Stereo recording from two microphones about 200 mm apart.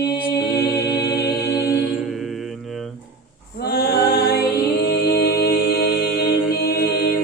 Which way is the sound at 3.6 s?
50° left (ahead or behind).